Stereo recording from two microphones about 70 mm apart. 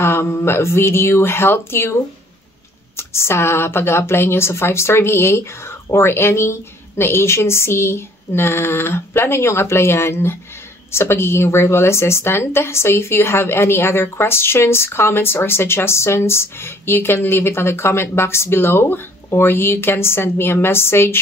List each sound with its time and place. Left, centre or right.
0.0 s a woman's voice: left
3.0 s a woman's voice: left